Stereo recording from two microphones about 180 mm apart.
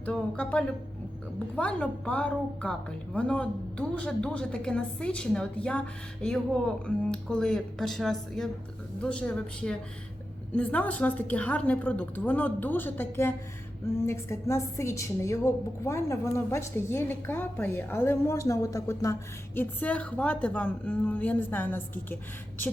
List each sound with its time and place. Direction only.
0.0 s a woman's voice: 5° left (ahead or behind)